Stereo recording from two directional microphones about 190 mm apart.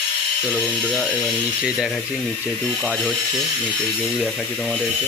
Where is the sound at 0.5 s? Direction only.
5° left (ahead or behind).